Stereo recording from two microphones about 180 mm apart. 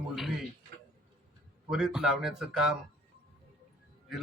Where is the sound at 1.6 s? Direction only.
5° right (ahead or behind).